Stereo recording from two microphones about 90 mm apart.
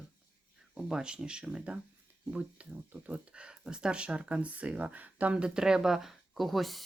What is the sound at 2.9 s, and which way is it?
Speech, 15° right (ahead or behind).